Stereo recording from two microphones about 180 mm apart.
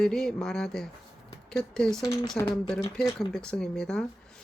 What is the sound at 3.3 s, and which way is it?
Speech, 5° left (ahead or behind).